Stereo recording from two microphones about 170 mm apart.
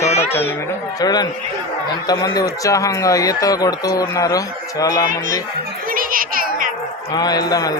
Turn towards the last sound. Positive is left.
turn(degrees=20)  # may be behind; listen again after turning